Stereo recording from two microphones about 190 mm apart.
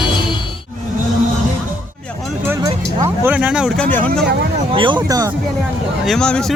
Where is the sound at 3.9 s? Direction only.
10° left (ahead or behind).